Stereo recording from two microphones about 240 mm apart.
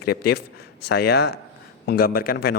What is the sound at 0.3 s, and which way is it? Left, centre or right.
A man's voice, left.